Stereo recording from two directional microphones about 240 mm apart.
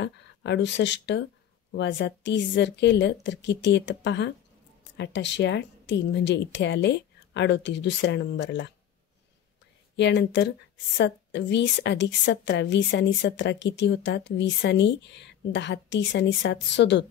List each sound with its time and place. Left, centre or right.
0.0 s a woman's voice: left
9.9 s a woman's voice: left